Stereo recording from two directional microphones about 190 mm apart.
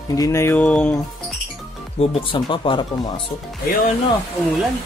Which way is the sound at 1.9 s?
25° left (ahead or behind).